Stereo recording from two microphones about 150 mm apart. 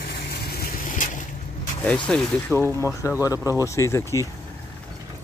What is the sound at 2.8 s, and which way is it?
Speech, 20° left (ahead or behind).